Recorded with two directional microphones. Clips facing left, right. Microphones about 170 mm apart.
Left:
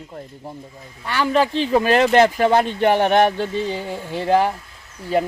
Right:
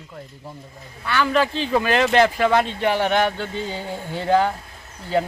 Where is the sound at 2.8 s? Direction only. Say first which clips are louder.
Left 4 dB; 50° left (ahead or behind).